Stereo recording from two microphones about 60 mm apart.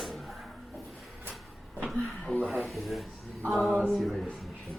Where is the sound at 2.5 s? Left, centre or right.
Centre.